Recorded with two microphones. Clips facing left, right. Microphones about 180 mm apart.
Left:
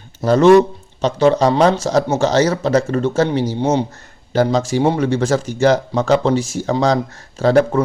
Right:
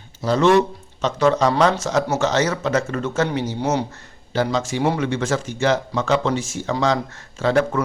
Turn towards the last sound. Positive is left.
turn(degrees=35)  # may be behind; listen again after turning